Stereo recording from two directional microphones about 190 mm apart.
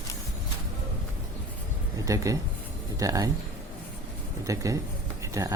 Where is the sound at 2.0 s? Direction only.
15° right (ahead or behind).